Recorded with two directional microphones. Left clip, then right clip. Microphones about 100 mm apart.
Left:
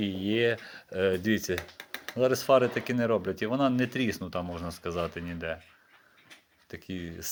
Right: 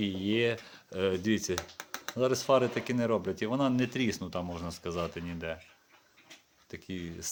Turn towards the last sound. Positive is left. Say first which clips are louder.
# left 2 dB
turn(degrees=0)  # may be behind; listen again after turning